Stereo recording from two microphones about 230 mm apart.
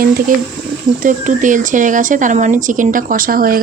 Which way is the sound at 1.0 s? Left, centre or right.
Right.